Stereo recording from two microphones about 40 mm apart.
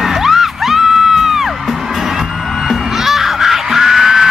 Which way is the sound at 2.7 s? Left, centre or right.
Centre.